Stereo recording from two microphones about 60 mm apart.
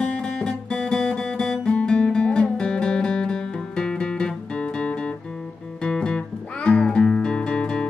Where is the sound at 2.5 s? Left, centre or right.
Centre.